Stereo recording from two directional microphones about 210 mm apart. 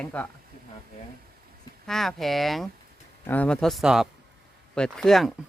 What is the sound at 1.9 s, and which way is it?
A woman's voice, centre (ahead or behind).